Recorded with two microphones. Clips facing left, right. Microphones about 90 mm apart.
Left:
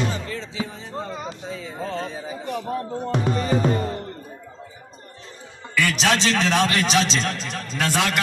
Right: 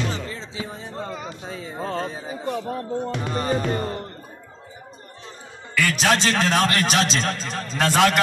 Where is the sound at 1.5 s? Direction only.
40° right (ahead or behind).